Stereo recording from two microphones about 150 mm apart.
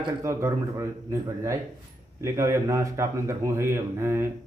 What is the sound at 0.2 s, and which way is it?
A man's voice, 20° right (ahead or behind).